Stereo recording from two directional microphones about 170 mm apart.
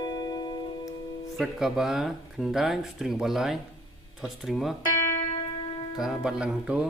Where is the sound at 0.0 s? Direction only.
25° left (ahead or behind).